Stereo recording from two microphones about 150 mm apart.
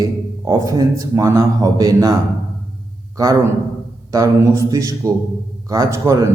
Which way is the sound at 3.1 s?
20° right (ahead or behind).